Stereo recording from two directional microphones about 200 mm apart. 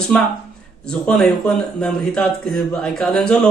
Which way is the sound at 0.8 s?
5° left (ahead or behind).